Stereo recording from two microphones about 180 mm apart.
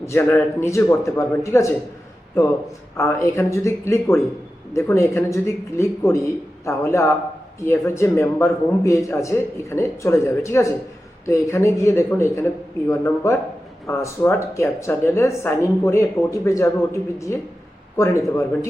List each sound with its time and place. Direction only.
0.0 s a man's voice: 15° left (ahead or behind)
3.0 s a man's voice: 15° left (ahead or behind)
17.9 s a man's voice: 15° left (ahead or behind)